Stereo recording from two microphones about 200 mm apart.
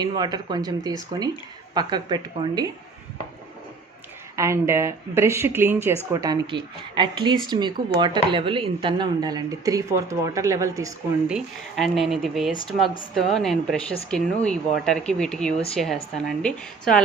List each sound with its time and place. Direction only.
0.0 s speech: 20° right (ahead or behind)
4.4 s speech: 15° right (ahead or behind)
11.3 s speech: centre (ahead or behind)